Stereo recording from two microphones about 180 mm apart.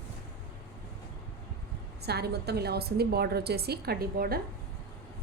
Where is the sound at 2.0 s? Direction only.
65° right (ahead or behind).